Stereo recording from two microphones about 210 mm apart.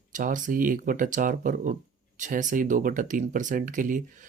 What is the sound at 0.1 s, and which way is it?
Speech, 40° right (ahead or behind).